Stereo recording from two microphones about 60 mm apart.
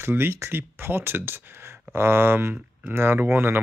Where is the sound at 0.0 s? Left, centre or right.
Right.